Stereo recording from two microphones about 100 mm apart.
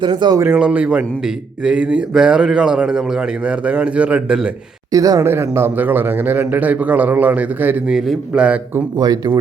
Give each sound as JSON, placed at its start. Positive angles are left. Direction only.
{"t": 0.0, "sound": "speech", "side_deg": -50}
{"t": 0.4, "sound": "a man's voice", "side_deg": -15}
{"t": 4.9, "sound": "speech", "side_deg": -35}
{"t": 5.2, "sound": "a man's voice", "side_deg": -25}
{"t": 7.9, "sound": "a man's voice", "side_deg": -5}
{"t": 9.0, "sound": "speech", "side_deg": -40}